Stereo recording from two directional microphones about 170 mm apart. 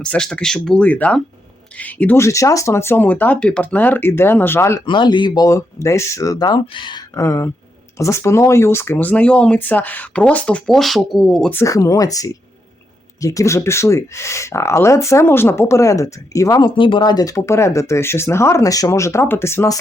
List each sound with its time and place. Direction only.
0.0 s speech: 5° left (ahead or behind)
4.9 s speech: 25° left (ahead or behind); by 11.5 s centre (ahead or behind)
11.5 s speech: 20° left (ahead or behind)